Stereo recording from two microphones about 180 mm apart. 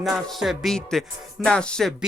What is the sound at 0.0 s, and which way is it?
Speech, centre (ahead or behind).